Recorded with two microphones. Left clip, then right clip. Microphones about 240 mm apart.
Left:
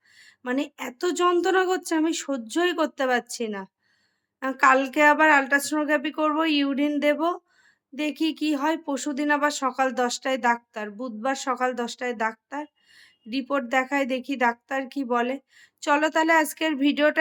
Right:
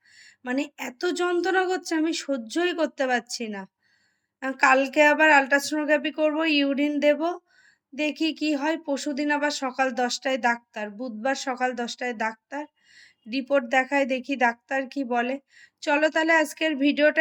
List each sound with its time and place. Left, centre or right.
0.1 s speech: centre